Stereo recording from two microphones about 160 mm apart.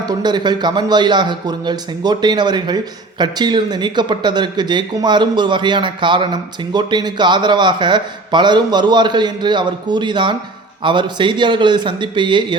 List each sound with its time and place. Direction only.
0.0 s a man's voice: 25° right (ahead or behind)